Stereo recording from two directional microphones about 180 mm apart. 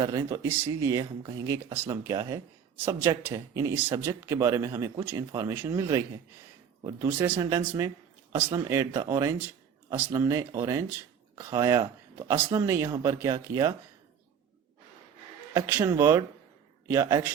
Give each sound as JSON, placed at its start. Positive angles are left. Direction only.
{"t": 0.0, "sound": "speech", "side_deg": -20}
{"t": 15.5, "sound": "speech", "side_deg": -20}